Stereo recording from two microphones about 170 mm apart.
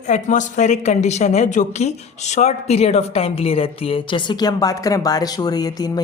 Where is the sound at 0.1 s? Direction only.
45° left (ahead or behind).